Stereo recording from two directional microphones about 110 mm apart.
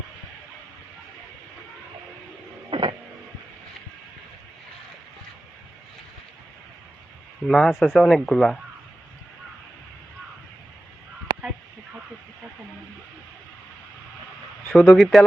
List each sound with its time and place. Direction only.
2.6 s music: 50° right (ahead or behind)
7.4 s speech: centre (ahead or behind)
14.7 s speech: 5° left (ahead or behind)